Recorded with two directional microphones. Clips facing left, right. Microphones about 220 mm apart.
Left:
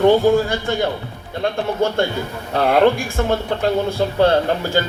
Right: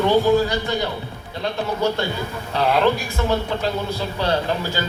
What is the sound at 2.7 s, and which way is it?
Speech, 50° left (ahead or behind).